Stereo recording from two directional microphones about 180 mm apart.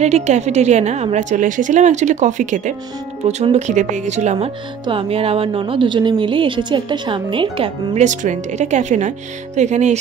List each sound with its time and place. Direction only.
0.0 s a woman's voice: 40° right (ahead or behind)